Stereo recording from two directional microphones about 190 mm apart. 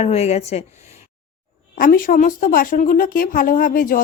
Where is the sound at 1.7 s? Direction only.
50° left (ahead or behind).